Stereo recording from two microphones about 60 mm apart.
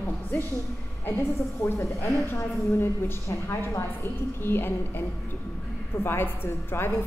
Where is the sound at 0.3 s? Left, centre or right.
Left.